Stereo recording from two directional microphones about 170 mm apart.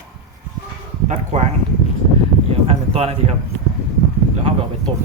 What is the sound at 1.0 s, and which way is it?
Speech, 45° right (ahead or behind).